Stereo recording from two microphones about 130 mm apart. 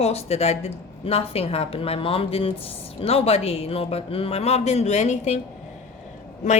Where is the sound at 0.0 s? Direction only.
55° left (ahead or behind).